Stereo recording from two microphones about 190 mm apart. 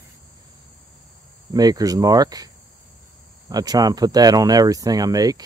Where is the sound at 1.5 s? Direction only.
20° right (ahead or behind).